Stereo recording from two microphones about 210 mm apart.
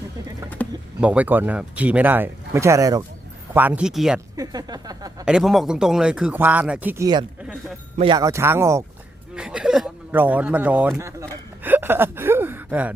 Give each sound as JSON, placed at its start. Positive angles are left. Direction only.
{"t": 0.6, "sound": "speech", "side_deg": 10}
{"t": 1.0, "sound": "speech", "side_deg": -5}
{"t": 4.4, "sound": "speech", "side_deg": -20}
{"t": 5.2, "sound": "speech", "side_deg": -5}